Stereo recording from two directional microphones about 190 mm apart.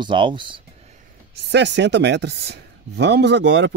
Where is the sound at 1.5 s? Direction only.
65° right (ahead or behind).